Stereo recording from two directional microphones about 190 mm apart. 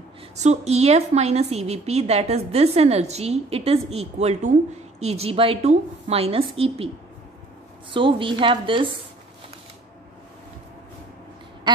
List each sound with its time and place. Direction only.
0.4 s a woman's voice: 35° right (ahead or behind)
7.9 s a woman's voice: 25° right (ahead or behind)